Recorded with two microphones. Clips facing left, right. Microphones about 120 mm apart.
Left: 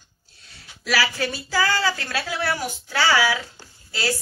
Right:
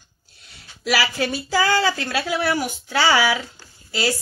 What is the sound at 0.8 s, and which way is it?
A woman's voice, 20° right (ahead or behind).